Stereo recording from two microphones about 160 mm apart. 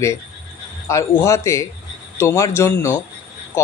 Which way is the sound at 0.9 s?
20° left (ahead or behind).